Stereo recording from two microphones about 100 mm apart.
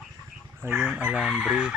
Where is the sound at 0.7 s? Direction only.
5° right (ahead or behind).